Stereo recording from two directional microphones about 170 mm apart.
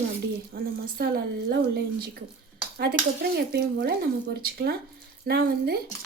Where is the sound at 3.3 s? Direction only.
80° right.